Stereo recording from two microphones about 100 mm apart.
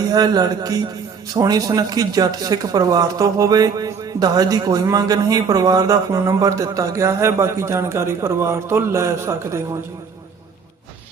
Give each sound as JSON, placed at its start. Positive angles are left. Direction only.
{"t": 0.1, "sound": "speech", "side_deg": -40}